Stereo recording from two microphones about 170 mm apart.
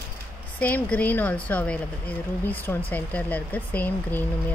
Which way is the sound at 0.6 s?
10° left (ahead or behind).